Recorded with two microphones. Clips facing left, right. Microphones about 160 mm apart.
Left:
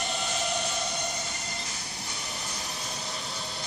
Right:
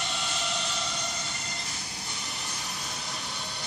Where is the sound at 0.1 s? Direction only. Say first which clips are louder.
Left 3 dB; 45° left (ahead or behind).